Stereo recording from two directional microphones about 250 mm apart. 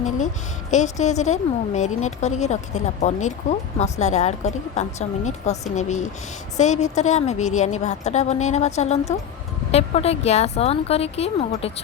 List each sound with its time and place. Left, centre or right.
0.7 s speech: left